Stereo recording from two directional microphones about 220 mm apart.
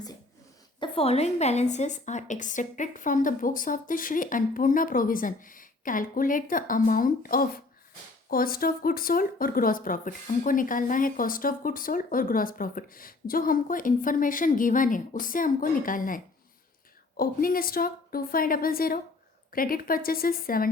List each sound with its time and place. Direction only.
0.8 s speech: 25° left (ahead or behind); by 20.7 s 40° left (ahead or behind)